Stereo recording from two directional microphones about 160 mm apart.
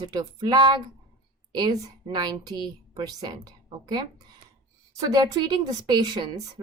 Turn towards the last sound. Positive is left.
turn(degrees=-30)  # may be behind; listen again after turning